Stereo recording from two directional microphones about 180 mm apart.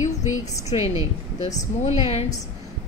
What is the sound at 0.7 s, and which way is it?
Speech, 30° left (ahead or behind).